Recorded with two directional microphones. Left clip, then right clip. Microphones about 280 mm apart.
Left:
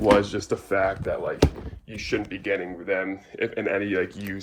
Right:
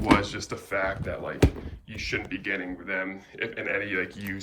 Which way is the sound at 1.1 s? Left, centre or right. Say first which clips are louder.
Left 4 dB; centre.